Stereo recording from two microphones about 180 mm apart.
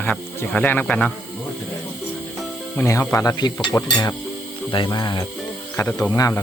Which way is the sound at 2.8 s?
15° left (ahead or behind).